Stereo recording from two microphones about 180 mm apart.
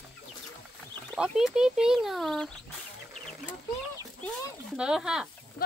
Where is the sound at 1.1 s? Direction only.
Centre (ahead or behind).